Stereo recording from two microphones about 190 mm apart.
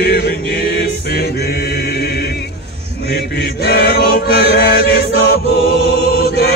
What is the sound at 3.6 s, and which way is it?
Chant, 55° left (ahead or behind).